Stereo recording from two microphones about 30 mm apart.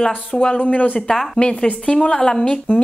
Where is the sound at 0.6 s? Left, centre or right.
Left.